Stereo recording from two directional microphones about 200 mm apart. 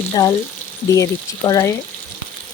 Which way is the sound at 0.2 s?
15° left (ahead or behind).